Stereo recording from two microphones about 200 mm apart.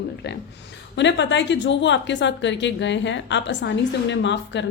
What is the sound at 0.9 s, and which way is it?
Speech, 60° left (ahead or behind).